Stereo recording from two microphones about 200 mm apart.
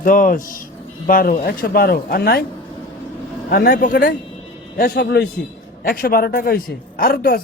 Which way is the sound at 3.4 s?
50° left (ahead or behind).